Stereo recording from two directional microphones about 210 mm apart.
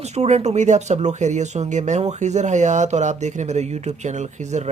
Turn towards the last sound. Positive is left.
turn(degrees=-35)  # may be behind; listen again after turning